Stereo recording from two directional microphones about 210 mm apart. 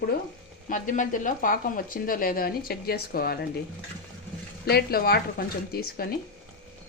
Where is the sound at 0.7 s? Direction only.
40° left (ahead or behind).